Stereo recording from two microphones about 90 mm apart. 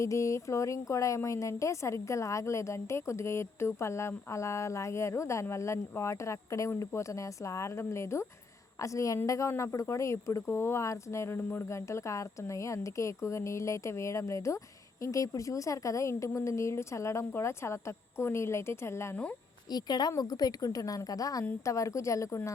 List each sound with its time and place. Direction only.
0.0 s speech: 35° left (ahead or behind)
19.1 s speech: 15° left (ahead or behind)
19.7 s a woman's voice: 50° left (ahead or behind)